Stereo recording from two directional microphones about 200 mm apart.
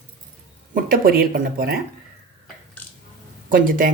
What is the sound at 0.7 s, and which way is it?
Speech, 45° right (ahead or behind).